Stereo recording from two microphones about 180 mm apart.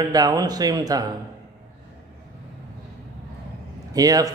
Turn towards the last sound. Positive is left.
turn(degrees=-20)  # may be behind; listen again after turning